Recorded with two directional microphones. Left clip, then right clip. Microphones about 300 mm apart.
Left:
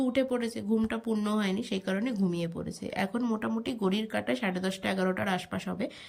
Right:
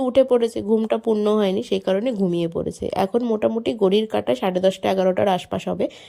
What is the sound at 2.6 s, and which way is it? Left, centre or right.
Speech, right.